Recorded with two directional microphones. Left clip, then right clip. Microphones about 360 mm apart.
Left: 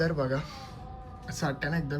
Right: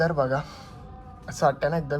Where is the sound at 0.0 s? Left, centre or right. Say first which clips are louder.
Right 6 dB; centre.